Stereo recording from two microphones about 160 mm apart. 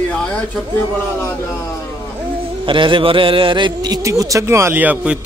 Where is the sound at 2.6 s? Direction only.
30° right (ahead or behind).